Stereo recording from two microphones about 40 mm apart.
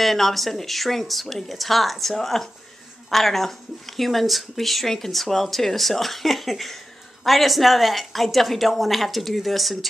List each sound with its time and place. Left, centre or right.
0.0 s speech: centre